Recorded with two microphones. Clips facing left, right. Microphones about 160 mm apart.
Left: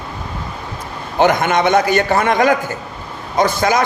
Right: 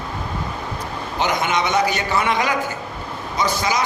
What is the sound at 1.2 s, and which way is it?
A man's voice, 55° left (ahead or behind).